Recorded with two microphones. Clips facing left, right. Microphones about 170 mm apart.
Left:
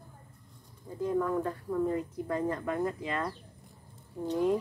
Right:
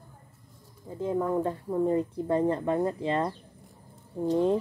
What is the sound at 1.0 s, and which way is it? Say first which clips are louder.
Speech: right 2 dB; 25° right (ahead or behind).